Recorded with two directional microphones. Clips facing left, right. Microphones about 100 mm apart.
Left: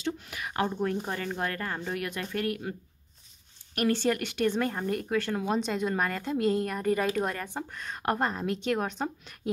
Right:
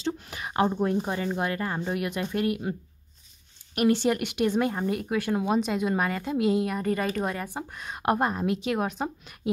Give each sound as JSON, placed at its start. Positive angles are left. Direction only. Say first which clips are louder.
{"t": 0.0, "sound": "speech", "louder": "right 2 dB", "side_deg": -30}
{"t": 3.7, "sound": "a woman's voice", "louder": "right 3 dB", "side_deg": -15}
{"t": 7.4, "sound": "a woman's voice", "louder": "right 1 dB", "side_deg": -15}